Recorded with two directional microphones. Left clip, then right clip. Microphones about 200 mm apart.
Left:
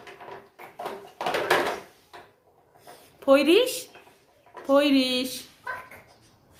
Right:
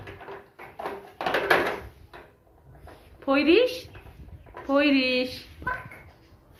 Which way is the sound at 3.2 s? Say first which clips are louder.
Left 2 dB; 30° left (ahead or behind).